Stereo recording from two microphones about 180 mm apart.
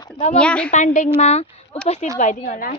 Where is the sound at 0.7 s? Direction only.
45° left (ahead or behind).